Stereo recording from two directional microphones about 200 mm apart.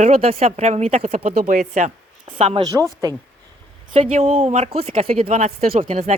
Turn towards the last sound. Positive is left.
turn(degrees=-35)  # may be behind; listen again after turning